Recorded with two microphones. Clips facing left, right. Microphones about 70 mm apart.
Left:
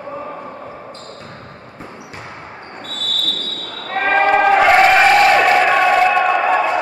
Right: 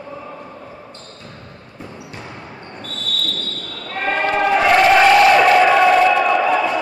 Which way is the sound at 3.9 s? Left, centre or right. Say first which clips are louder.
Left 5 dB; left.